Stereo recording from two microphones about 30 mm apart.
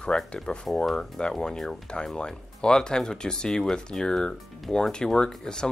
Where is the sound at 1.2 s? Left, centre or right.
Left.